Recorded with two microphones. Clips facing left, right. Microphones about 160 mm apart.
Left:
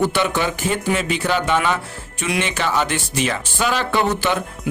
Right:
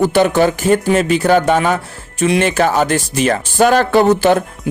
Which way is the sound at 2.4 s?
45° right (ahead or behind).